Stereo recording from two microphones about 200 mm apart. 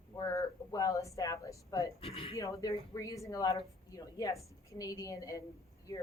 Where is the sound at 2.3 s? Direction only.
15° left (ahead or behind).